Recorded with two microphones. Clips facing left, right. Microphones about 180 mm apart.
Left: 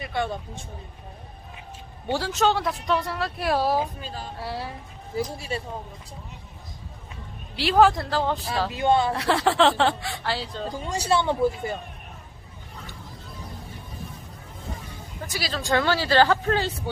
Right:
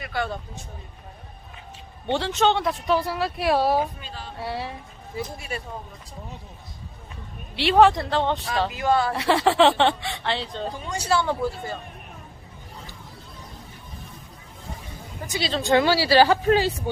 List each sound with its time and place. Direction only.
0.0 s speech: 20° left (ahead or behind)
2.1 s speech: 5° left (ahead or behind)
4.0 s speech: 40° left (ahead or behind)
4.4 s speech: centre (ahead or behind)
5.1 s speech: 30° left (ahead or behind)
7.5 s speech: centre (ahead or behind)
8.7 s speech: 25° left (ahead or behind)
9.1 s speech: centre (ahead or behind)
10.8 s speech: 30° left (ahead or behind)
15.3 s speech: 25° right (ahead or behind)